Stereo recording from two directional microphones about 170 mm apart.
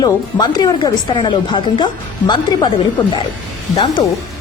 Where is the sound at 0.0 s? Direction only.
25° left (ahead or behind).